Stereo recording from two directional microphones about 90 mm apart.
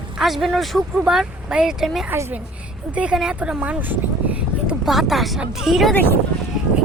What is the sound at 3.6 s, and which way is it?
Speech, 20° right (ahead or behind).